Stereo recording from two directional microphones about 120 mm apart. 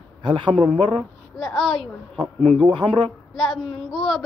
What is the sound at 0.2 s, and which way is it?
Speech, 40° right (ahead or behind).